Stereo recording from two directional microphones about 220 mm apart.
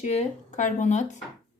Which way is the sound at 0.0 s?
30° left (ahead or behind).